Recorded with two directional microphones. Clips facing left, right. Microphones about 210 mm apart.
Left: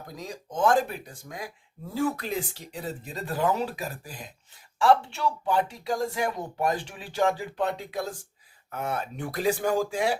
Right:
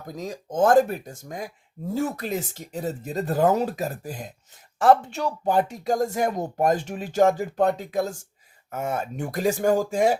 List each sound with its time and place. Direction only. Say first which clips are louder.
0.2 s speech: right 4 dB; 45° right (ahead or behind)